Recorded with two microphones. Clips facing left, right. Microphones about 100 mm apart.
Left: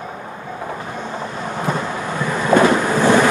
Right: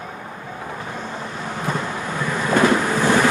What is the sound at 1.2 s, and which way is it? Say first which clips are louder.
Vehicle: left 3 dB; 20° left (ahead or behind).